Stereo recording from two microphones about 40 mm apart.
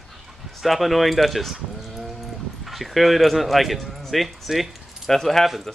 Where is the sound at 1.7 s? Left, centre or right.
Centre.